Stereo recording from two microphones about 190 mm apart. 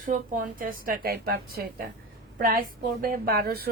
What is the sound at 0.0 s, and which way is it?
A woman's voice, 45° right (ahead or behind).